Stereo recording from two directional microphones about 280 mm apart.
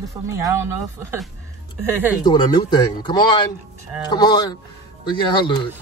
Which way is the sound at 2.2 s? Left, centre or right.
Centre.